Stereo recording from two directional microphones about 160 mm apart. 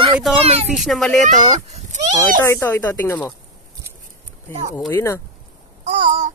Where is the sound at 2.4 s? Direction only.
15° left (ahead or behind).